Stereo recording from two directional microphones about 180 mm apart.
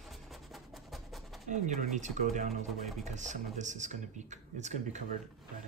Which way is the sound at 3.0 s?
40° right (ahead or behind).